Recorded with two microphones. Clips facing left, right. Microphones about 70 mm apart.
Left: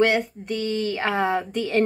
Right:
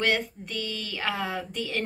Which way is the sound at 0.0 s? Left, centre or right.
Left.